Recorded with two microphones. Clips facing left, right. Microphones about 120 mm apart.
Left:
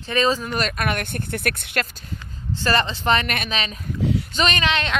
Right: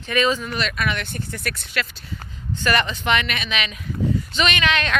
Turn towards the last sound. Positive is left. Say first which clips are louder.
# even
turn(degrees=25)  # may be behind; listen again after turning